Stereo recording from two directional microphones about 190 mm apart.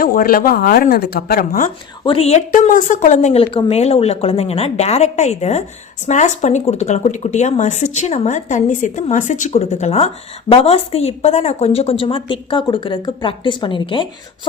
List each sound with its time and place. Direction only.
0.0 s speech: 50° left (ahead or behind)
2.0 s a woman's voice: 30° left (ahead or behind)
3.4 s a woman's voice: 30° left (ahead or behind)